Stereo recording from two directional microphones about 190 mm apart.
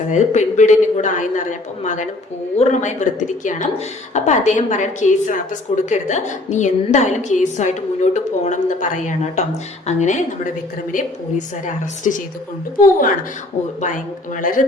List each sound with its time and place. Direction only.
0.1 s a woman's voice: 40° left (ahead or behind)
13.8 s a woman's voice: 45° left (ahead or behind)